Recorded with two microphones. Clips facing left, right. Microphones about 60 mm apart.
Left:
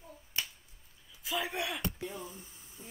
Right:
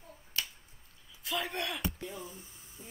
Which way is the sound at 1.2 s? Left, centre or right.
Centre.